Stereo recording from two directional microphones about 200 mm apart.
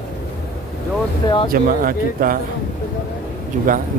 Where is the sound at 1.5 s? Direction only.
45° right (ahead or behind).